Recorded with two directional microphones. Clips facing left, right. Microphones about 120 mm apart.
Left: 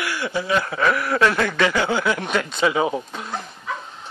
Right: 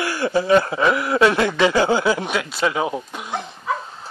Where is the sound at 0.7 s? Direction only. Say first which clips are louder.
Right 2 dB; 20° right (ahead or behind).